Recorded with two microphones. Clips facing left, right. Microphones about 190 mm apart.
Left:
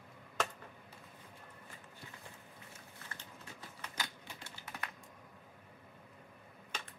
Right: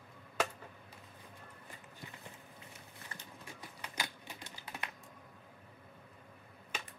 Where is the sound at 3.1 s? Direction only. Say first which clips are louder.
Right 2 dB; 15° right (ahead or behind).